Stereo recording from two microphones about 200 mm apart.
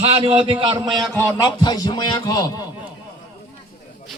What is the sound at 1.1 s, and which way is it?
A man's voice, 15° left (ahead or behind).